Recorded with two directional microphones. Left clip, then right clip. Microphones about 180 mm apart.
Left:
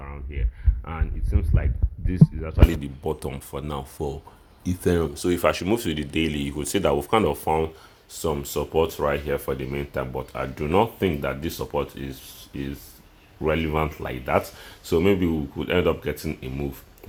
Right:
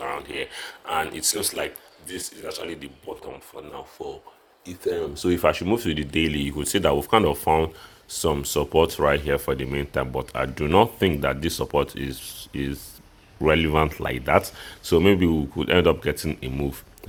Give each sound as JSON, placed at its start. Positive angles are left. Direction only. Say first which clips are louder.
{"t": 0.1, "sound": "speech", "louder": "right 12 dB", "side_deg": -15}
{"t": 8.2, "sound": "speech", "louder": "right 3 dB", "side_deg": -20}